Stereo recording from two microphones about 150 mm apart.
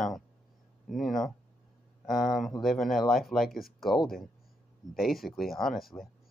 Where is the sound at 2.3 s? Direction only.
Centre (ahead or behind).